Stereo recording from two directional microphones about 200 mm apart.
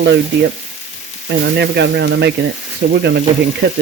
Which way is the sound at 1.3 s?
55° right (ahead or behind).